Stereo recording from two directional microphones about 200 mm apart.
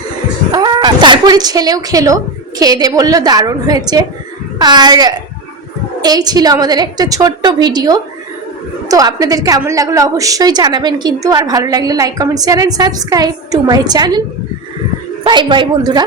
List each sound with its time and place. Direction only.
0.5 s a woman's voice: 20° right (ahead or behind)
15.2 s a woman's voice: 25° right (ahead or behind)